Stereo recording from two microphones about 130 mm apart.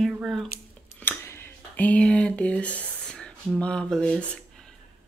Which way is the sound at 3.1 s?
5° left (ahead or behind).